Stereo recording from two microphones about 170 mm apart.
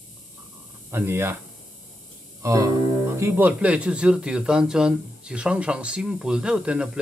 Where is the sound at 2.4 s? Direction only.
20° right (ahead or behind).